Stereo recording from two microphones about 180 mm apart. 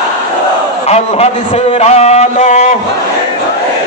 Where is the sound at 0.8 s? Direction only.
35° left (ahead or behind).